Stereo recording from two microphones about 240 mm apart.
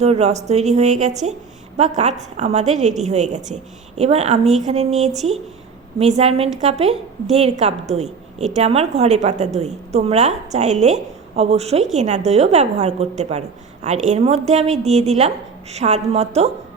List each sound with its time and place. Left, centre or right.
0.0 s a woman's voice: right
2.4 s a woman's voice: right